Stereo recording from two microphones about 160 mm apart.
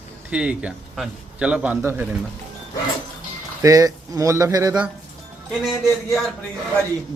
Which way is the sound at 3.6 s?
20° right (ahead or behind).